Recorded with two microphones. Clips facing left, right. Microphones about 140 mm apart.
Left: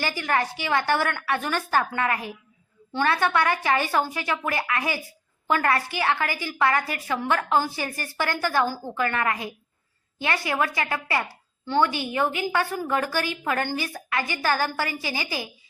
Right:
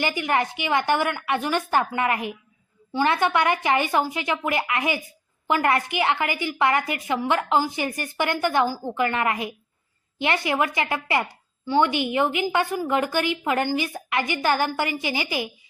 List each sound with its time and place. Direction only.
0.0 s a woman's voice: 15° right (ahead or behind)